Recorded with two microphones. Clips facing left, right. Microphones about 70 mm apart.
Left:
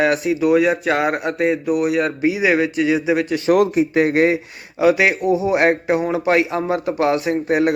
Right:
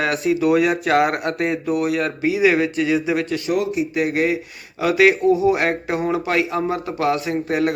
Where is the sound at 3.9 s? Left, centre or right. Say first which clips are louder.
Left 4 dB; left.